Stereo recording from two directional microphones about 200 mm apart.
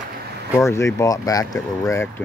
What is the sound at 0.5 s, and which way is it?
Speech, 15° left (ahead or behind).